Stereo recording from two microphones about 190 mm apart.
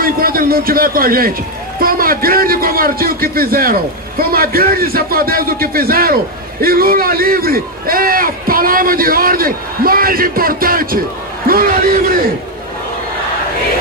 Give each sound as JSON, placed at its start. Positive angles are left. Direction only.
{"t": 0.0, "sound": "a man's voice", "side_deg": -50}